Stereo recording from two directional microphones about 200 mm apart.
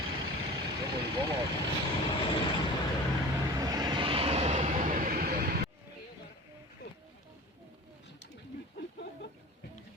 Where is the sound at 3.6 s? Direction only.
20° right (ahead or behind); by 5.6 s 50° right (ahead or behind).